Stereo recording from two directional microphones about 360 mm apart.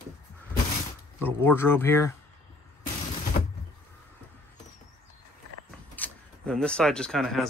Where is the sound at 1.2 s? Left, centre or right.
Centre.